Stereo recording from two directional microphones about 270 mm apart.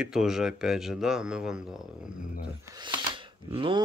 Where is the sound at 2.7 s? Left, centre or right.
Centre.